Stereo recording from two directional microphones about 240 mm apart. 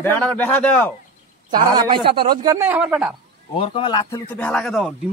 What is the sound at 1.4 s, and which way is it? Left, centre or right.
A man's voice, centre.